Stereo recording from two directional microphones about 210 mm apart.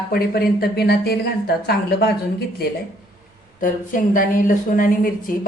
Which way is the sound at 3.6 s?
40° left (ahead or behind).